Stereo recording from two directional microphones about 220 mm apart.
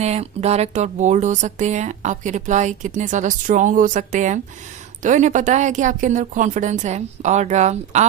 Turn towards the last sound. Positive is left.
turn(degrees=-30)  # may be behind; listen again after turning